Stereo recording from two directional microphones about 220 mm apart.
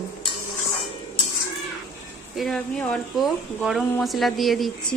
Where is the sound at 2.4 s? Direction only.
5° left (ahead or behind).